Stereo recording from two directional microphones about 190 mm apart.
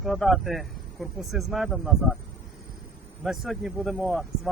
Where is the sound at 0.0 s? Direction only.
Centre (ahead or behind).